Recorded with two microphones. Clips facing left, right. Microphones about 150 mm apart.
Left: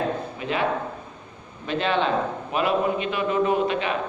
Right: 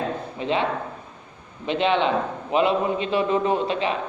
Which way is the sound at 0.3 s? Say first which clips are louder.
Right 4 dB; 25° right (ahead or behind).